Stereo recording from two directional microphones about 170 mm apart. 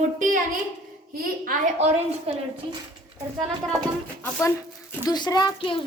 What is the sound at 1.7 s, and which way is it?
Speech, 40° right (ahead or behind).